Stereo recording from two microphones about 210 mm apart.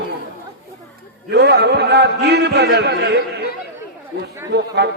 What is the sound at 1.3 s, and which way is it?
A man's voice, 55° right (ahead or behind).